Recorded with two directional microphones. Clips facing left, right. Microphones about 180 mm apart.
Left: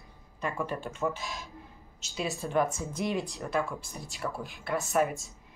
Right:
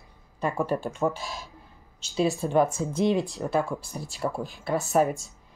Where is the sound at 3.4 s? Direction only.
35° right (ahead or behind).